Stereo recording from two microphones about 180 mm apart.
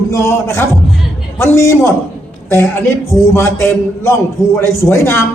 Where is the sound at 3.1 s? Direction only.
15° left (ahead or behind).